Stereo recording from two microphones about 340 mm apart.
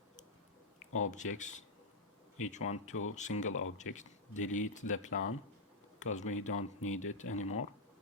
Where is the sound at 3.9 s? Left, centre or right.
Left.